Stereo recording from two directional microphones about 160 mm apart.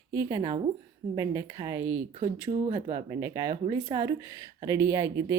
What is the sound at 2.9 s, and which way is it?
Speech, 20° right (ahead or behind).